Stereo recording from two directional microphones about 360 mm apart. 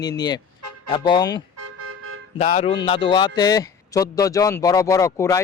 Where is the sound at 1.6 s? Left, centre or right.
Right.